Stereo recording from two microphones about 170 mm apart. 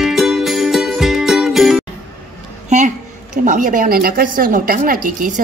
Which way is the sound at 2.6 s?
45° right (ahead or behind).